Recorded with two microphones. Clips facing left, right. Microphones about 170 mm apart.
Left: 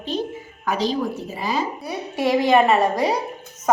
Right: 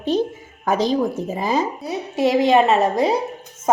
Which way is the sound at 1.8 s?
25° right (ahead or behind).